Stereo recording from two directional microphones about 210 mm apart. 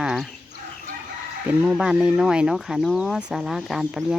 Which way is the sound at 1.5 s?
5° right (ahead or behind).